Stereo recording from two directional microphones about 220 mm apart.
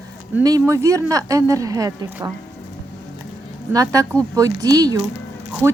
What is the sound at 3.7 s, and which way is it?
Speech, 15° right (ahead or behind).